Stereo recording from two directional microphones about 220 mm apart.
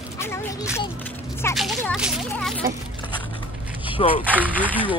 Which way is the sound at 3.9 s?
25° left (ahead or behind).